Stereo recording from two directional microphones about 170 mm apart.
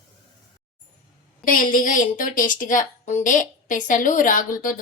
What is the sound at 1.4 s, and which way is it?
A woman's voice, 55° left (ahead or behind).